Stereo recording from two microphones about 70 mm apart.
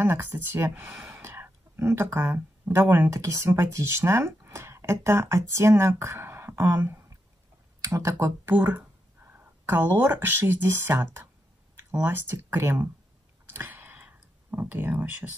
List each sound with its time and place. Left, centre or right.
0.0 s speech: right
0.8 s speech: centre
1.2 s speech: right
3.1 s speech: right
8.5 s speech: right
13.5 s a sound: right
14.0 s clicking: right